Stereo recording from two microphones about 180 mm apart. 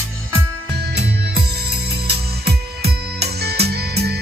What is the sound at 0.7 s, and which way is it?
Music, 70° right (ahead or behind).